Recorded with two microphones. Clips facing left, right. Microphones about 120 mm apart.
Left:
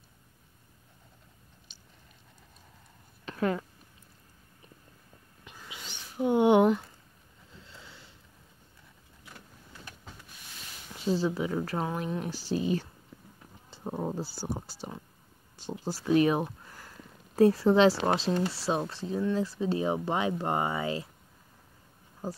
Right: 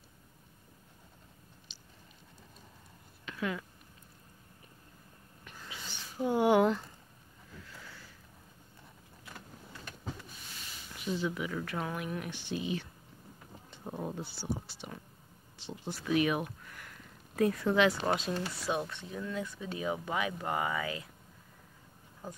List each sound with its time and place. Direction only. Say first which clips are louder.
1.7 s chewing: right 1 dB; 50° left (ahead or behind)
3.3 s a sound: left 7 dB; 40° left (ahead or behind)
5.6 s a sound: even; 15° left (ahead or behind)
7.5 s sniff: right 1 dB; 25° left (ahead or behind)
11.0 s speech: left 6 dB; 35° left (ahead or behind)
13.8 s speech: left 5 dB; 30° left (ahead or behind)